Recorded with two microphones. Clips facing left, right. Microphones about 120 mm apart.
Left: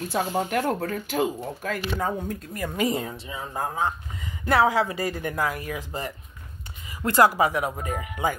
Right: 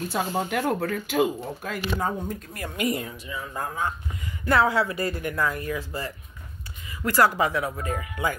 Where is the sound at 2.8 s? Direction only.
25° left (ahead or behind).